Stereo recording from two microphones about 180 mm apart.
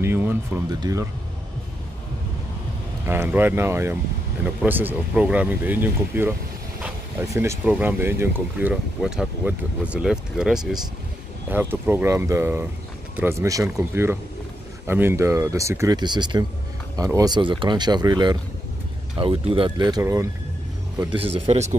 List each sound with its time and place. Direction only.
0.0 s music: 10° right (ahead or behind)
0.7 s speech: 20° right (ahead or behind)
3.1 s speech: 10° right (ahead or behind)
21.1 s speech: 30° right (ahead or behind)